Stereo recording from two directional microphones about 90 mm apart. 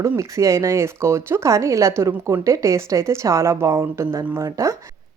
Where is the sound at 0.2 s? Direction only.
35° right (ahead or behind).